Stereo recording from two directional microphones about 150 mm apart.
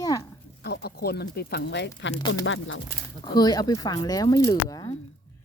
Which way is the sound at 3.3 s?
25° left (ahead or behind).